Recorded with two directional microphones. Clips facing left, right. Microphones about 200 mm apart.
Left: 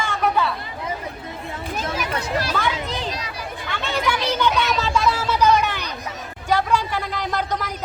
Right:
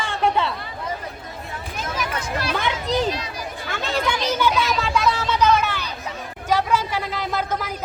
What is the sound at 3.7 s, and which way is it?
Speech, 35° right (ahead or behind).